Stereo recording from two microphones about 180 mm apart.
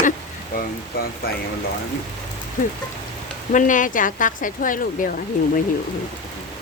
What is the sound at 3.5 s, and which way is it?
Speech, 45° left (ahead or behind).